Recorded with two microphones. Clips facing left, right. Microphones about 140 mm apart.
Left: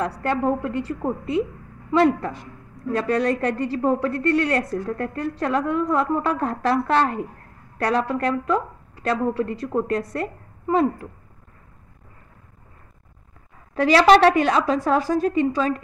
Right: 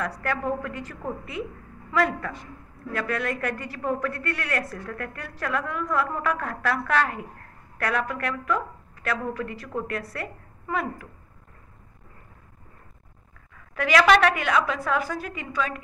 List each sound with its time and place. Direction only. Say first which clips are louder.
0.0 s a woman's voice: left 6 dB; 30° left (ahead or behind)
13.7 s a woman's voice: left 5 dB; 30° left (ahead or behind)